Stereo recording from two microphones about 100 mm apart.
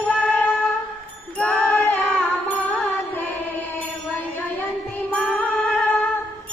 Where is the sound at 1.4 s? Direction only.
15° left (ahead or behind).